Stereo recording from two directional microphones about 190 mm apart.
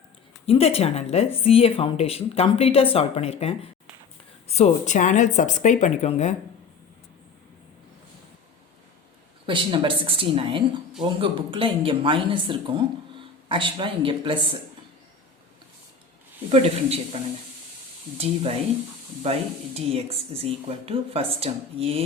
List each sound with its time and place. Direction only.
0.4 s speech: 30° left (ahead or behind)
9.5 s speech: 25° right (ahead or behind)
16.5 s speech: 35° right (ahead or behind)
19.2 s speech: 30° right (ahead or behind)